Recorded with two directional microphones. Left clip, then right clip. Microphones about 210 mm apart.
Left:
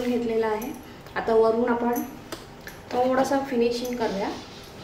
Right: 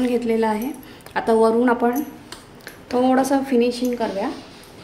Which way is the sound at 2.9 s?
50° right (ahead or behind).